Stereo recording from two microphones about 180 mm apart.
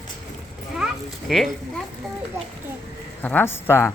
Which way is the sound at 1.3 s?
Centre (ahead or behind).